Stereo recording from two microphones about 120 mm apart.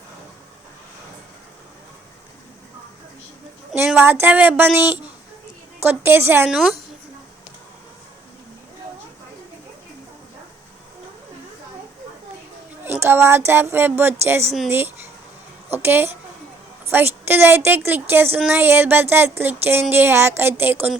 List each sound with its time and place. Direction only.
3.9 s speech: 15° right (ahead or behind)
6.5 s a woman's voice: centre (ahead or behind)
13.0 s speech: 20° right (ahead or behind)